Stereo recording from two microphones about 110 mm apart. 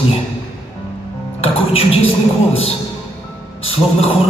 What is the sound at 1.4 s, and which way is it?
Music, 65° left (ahead or behind).